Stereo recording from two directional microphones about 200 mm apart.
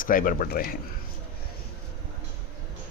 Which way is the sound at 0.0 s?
45° left (ahead or behind).